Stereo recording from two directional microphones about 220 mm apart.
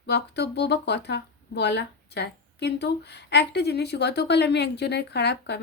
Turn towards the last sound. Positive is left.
turn(degrees=50)  # may be behind; listen again after turning